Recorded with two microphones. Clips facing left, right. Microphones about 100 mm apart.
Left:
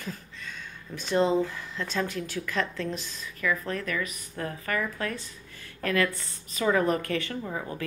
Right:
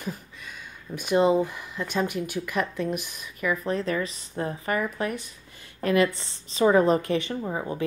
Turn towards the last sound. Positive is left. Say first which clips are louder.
# right 4 dB
turn(degrees=-20)  # may be behind; listen again after turning